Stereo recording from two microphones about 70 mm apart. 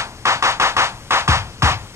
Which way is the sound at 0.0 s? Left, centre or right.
Right.